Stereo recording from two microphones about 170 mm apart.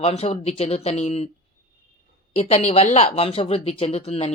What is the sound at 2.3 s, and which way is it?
Speech, 40° left (ahead or behind).